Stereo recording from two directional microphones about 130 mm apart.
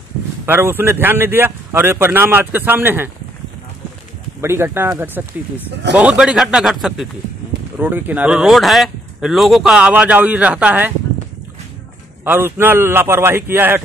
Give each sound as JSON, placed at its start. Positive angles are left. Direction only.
{"t": 0.5, "sound": "speech", "side_deg": -15}
{"t": 4.4, "sound": "speech", "side_deg": -20}
{"t": 5.9, "sound": "a man's voice", "side_deg": -10}
{"t": 7.8, "sound": "speech", "side_deg": -15}
{"t": 12.3, "sound": "speech", "side_deg": -20}